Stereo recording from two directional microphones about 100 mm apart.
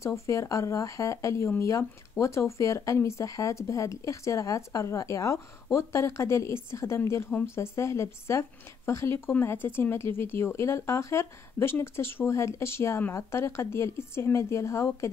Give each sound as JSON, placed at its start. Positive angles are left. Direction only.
{"t": 0.0, "sound": "a woman's voice", "side_deg": 30}